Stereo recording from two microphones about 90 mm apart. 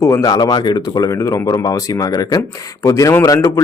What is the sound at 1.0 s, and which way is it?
Speech, 35° left (ahead or behind).